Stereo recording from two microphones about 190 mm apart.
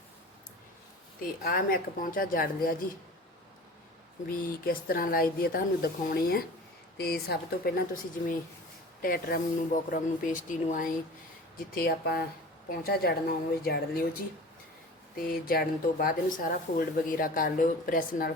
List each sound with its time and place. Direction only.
1.2 s speech: 50° left (ahead or behind)
4.3 s speech: 50° left (ahead or behind)
11.7 s speech: 55° left (ahead or behind)
15.1 s speech: 50° left (ahead or behind)